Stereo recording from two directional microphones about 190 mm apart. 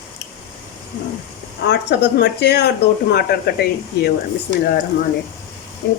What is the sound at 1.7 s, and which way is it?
Speech, 65° left (ahead or behind).